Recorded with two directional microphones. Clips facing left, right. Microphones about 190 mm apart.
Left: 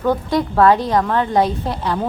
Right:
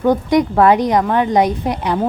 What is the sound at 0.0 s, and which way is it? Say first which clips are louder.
A woman's voice: right 4 dB; 15° right (ahead or behind).